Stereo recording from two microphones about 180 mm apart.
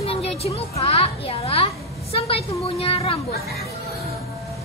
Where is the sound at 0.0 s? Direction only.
35° left (ahead or behind).